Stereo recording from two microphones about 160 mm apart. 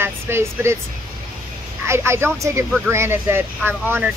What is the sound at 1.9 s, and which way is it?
Speech, 15° right (ahead or behind).